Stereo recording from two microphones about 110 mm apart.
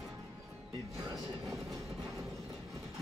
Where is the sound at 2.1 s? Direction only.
30° right (ahead or behind).